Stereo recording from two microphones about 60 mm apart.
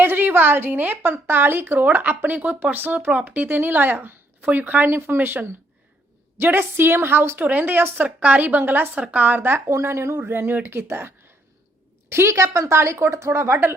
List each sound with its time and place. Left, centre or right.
0.0 s a woman's voice: right
8.0 s a woman's voice: right
9.6 s a woman's voice: right